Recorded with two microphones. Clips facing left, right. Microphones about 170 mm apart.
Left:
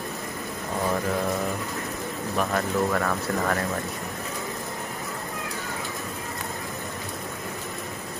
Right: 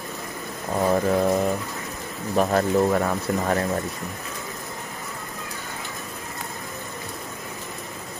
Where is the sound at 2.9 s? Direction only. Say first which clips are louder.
Right 3 dB; 25° right (ahead or behind).